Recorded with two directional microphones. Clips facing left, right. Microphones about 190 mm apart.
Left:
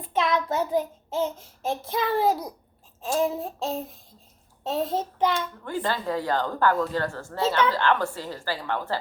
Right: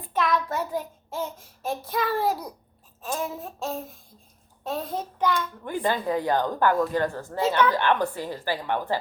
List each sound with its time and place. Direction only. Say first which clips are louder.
0.1 s child singing: left 1 dB; 20° left (ahead or behind)
1.9 s a child's voice: left 2 dB; 20° left (ahead or behind)
3.4 s a child's voice: left 2 dB; 25° left (ahead or behind)
5.6 s speech: right 3 dB; 15° right (ahead or behind)